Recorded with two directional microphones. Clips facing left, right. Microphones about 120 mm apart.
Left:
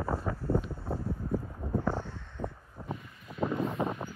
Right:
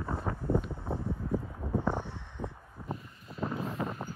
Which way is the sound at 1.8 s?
20° right (ahead or behind).